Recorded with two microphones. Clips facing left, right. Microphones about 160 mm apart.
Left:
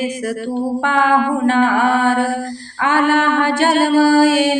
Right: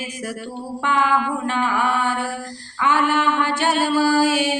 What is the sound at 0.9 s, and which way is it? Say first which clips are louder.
Music: left 3 dB; 60° left (ahead or behind).